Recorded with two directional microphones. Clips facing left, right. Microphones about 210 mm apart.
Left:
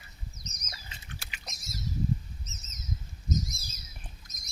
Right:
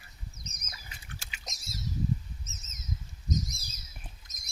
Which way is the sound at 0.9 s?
25° left (ahead or behind).